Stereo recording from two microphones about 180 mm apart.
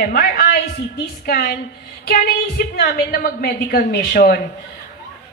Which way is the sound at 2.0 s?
60° left (ahead or behind).